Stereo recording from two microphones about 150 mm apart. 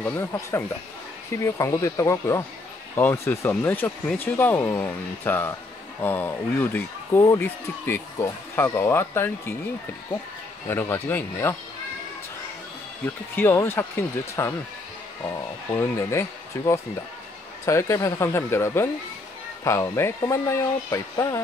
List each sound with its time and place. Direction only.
0.0 s speech: 15° left (ahead or behind)
10.7 s speech: 15° left (ahead or behind)
13.0 s speech: 15° left (ahead or behind)
15.7 s speech: 20° left (ahead or behind)